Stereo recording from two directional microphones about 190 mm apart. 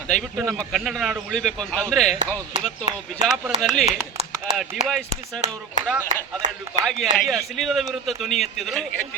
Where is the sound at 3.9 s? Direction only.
35° right (ahead or behind).